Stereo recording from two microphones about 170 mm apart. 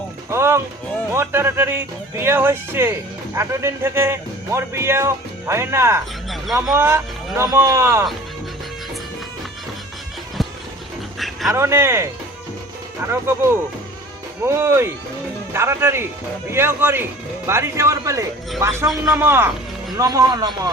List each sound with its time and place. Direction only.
0.3 s speech: 15° right (ahead or behind)
11.2 s dog: centre (ahead or behind)
11.5 s speech: 15° right (ahead or behind)
13.1 s speech: 15° right (ahead or behind)